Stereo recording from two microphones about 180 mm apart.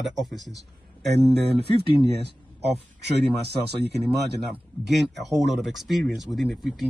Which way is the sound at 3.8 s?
65° right (ahead or behind).